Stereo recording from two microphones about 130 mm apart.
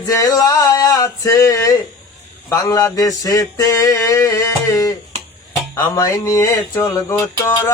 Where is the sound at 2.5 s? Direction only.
25° left (ahead or behind).